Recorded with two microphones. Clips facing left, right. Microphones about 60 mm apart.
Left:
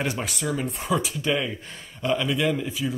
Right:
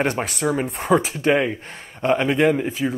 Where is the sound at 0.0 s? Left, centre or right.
Right.